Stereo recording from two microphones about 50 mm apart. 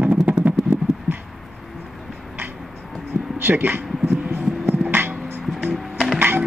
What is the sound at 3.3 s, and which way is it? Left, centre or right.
Music, right.